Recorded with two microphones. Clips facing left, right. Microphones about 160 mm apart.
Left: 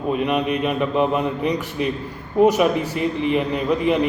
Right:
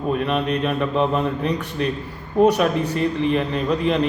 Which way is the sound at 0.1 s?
15° left (ahead or behind).